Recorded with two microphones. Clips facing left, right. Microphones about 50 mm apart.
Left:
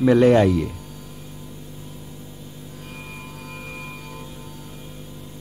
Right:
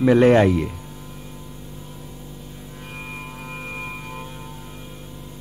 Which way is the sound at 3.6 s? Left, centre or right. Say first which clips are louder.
Right 5 dB; right.